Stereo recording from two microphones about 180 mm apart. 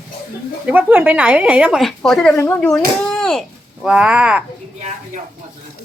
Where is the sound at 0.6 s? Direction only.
10° right (ahead or behind).